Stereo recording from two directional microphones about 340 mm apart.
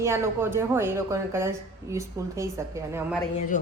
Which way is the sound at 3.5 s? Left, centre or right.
Left.